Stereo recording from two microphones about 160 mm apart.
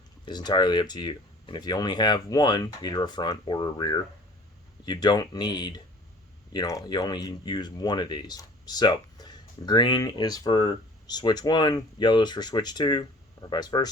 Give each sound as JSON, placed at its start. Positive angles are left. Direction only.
{"t": 0.3, "sound": "speech", "side_deg": 25}